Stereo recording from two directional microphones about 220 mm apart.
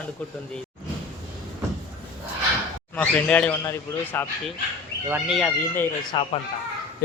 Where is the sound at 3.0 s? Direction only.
5° left (ahead or behind).